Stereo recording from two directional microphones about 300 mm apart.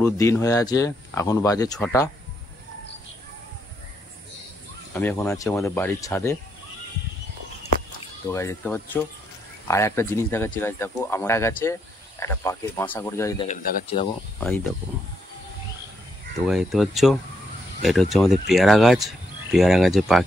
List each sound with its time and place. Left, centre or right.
0.0 s speech: centre
4.9 s speech: centre
8.3 s speech: centre
13.5 s speech: left
16.4 s speech: centre